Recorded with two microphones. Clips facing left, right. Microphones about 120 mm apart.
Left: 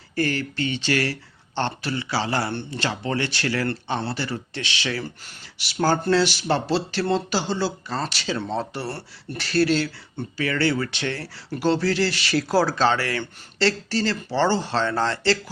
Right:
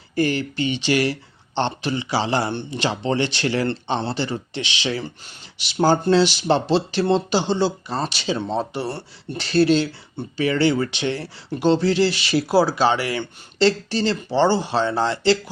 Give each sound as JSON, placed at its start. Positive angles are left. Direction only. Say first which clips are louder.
{"t": 0.2, "sound": "speech", "louder": "right 3 dB", "side_deg": -15}